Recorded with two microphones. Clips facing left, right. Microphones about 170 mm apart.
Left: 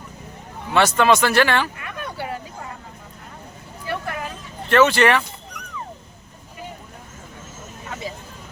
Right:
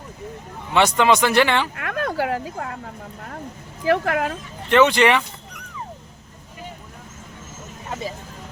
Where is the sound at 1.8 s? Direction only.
90° right.